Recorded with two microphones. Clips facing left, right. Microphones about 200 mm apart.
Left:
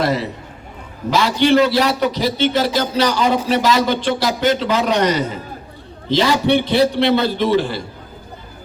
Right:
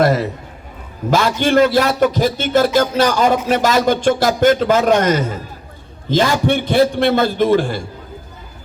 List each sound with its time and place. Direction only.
0.0 s a man's voice: 45° right (ahead or behind)